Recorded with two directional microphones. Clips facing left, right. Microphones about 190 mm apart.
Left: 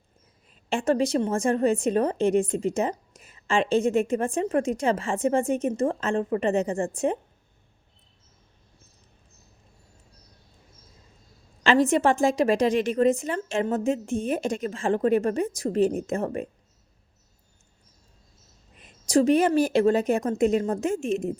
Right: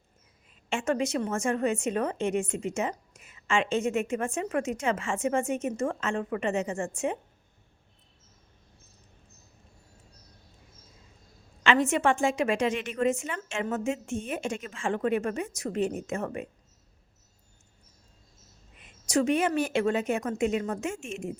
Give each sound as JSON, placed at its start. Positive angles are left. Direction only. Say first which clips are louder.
{"t": 0.7, "sound": "a woman's voice", "louder": "left 5 dB", "side_deg": 35}
{"t": 11.6, "sound": "a woman's voice", "louder": "left 4 dB", "side_deg": 35}
{"t": 18.8, "sound": "a woman's voice", "louder": "left 5 dB", "side_deg": 35}